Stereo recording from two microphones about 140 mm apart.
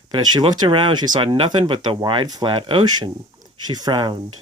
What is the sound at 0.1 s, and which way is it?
Speech, 30° right (ahead or behind).